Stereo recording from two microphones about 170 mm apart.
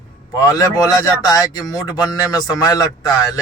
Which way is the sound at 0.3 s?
20° left (ahead or behind).